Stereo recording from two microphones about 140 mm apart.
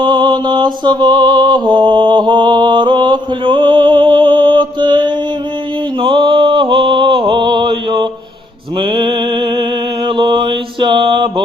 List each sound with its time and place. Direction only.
0.0 s mantra: 35° right (ahead or behind)
6.0 s a sound: 40° right (ahead or behind)
8.8 s music: 35° right (ahead or behind)
10.1 s mantra: 35° right (ahead or behind)